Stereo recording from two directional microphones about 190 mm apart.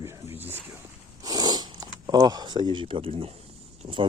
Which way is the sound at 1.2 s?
20° right (ahead or behind).